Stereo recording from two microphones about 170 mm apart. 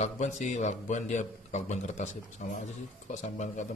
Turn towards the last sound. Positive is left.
turn(degrees=45)  # may be behind; listen again after turning